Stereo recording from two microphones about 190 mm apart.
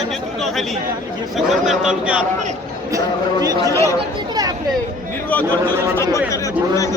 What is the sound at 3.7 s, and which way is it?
Speech, 15° left (ahead or behind).